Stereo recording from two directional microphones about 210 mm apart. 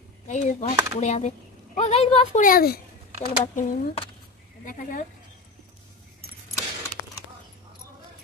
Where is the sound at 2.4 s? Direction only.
45° left (ahead or behind).